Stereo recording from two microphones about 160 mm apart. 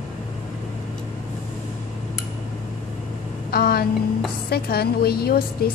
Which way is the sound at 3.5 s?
70° left (ahead or behind).